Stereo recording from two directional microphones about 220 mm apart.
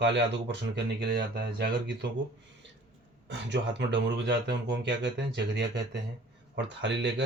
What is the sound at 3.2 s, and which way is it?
Speech, 55° right (ahead or behind).